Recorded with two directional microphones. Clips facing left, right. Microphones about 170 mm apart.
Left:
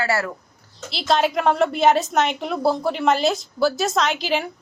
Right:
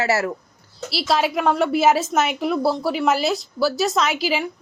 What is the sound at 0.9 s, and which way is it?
A woman's voice, 5° right (ahead or behind).